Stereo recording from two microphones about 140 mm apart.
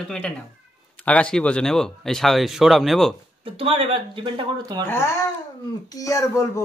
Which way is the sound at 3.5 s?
40° right (ahead or behind).